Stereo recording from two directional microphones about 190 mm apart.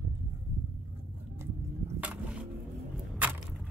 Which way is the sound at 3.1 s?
10° right (ahead or behind).